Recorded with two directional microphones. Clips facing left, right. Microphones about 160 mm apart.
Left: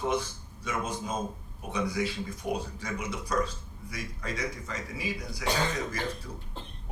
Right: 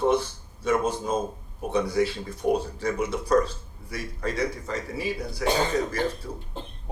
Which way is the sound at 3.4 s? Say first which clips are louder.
Right 2 dB; 30° right (ahead or behind).